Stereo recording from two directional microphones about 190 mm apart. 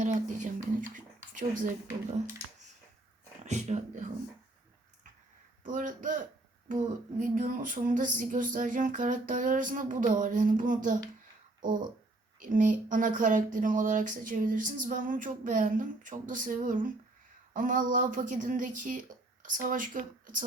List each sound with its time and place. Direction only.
0.0 s a sound: 40° right (ahead or behind)
3.4 s speech: 35° right (ahead or behind)
5.6 s speech: 45° right (ahead or behind)